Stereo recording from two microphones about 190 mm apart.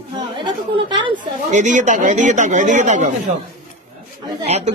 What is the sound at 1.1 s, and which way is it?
A man's voice, 40° right (ahead or behind).